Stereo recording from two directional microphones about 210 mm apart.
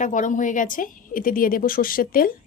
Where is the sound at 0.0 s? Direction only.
35° left (ahead or behind).